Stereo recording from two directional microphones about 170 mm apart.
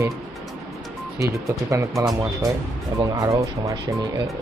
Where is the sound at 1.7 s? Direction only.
20° right (ahead or behind).